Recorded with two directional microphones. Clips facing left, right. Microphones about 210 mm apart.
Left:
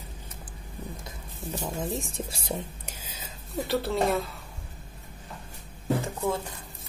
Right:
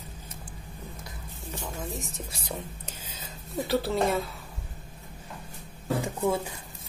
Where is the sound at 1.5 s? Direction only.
30° left (ahead or behind).